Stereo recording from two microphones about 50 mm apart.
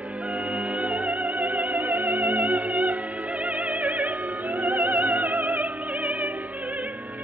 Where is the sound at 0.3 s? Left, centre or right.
Right.